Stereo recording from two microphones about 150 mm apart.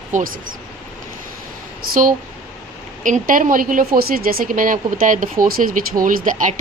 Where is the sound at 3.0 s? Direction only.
60° right (ahead or behind).